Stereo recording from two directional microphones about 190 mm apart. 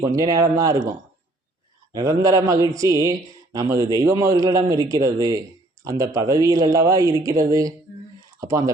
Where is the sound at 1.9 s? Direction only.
20° right (ahead or behind).